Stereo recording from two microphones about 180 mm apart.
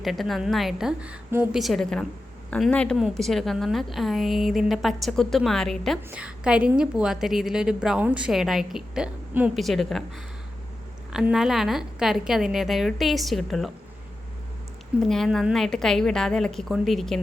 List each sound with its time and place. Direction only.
0.0 s a woman's voice: centre (ahead or behind)
1.6 s a woman's voice: centre (ahead or behind)
11.1 s a woman's voice: 5° right (ahead or behind)
15.0 s a woman's voice: centre (ahead or behind)